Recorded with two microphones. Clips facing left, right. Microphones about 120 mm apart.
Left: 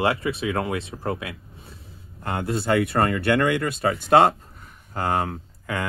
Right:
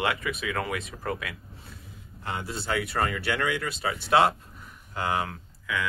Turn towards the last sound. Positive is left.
turn(degrees=45)  # may be behind; listen again after turning